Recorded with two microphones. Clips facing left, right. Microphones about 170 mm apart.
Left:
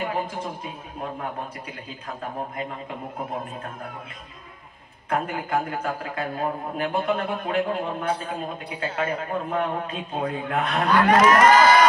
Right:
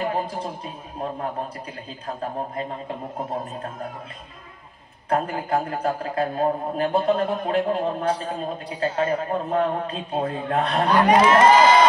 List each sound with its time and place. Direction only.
0.0 s a man's voice: 35° right (ahead or behind)
2.5 s a man's voice: 35° right (ahead or behind)
5.1 s a man's voice: 35° right (ahead or behind)
10.9 s crowd: 15° right (ahead or behind)
11.1 s crowd: 25° right (ahead or behind)